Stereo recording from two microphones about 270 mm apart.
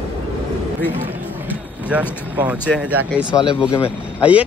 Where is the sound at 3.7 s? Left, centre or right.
Centre.